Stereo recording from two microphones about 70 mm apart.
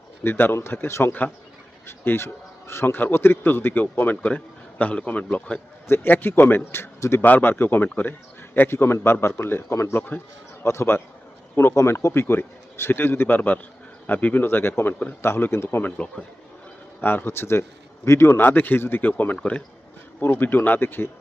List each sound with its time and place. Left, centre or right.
0.2 s a man's voice: left
15.8 s a man's voice: centre
17.0 s a man's voice: left